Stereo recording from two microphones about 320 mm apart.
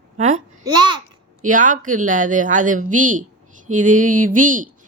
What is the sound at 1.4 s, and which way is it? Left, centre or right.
Speech, right.